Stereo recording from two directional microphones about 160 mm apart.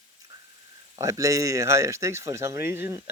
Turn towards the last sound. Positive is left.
turn(degrees=-15)  # may be behind; listen again after turning